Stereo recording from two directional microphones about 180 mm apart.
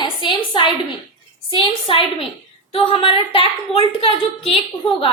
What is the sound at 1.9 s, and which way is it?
A woman's voice, 30° left (ahead or behind).